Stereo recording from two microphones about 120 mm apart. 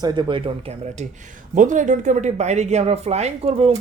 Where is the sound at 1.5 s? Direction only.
90° right; by 3.7 s 65° right (ahead or behind).